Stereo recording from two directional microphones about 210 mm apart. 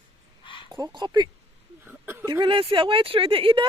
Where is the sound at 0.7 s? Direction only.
20° right (ahead or behind).